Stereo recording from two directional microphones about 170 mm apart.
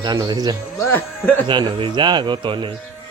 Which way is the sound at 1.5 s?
25° right (ahead or behind).